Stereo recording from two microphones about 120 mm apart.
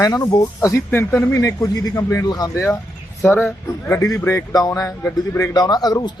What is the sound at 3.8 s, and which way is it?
A man's voice, 25° left (ahead or behind).